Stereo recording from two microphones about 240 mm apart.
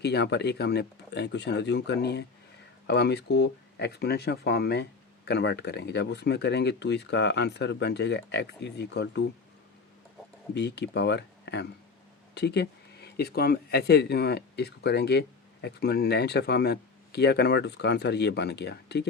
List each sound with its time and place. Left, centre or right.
0.0 s speech: left
10.5 s speech: left